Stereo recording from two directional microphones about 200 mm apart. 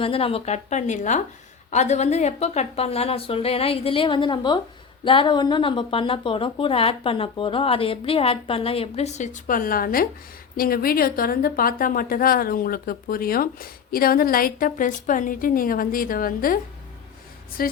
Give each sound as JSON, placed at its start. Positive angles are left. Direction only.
{"t": 0.0, "sound": "a woman's voice", "side_deg": 30}
{"t": 17.6, "sound": "a woman's voice", "side_deg": 50}